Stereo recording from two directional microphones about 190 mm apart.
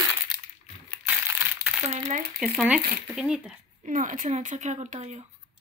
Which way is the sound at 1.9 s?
35° right (ahead or behind).